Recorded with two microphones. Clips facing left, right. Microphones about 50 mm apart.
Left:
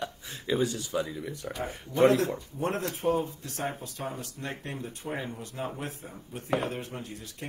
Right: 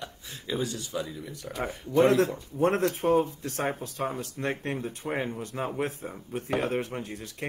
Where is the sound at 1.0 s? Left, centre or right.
Centre.